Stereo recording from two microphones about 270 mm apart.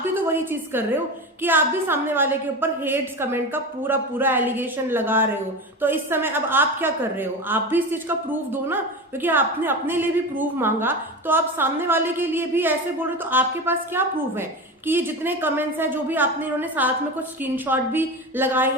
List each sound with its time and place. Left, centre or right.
0.0 s a woman's voice: centre